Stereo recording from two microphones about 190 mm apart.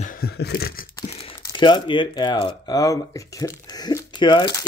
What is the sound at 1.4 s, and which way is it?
Speech, 25° left (ahead or behind).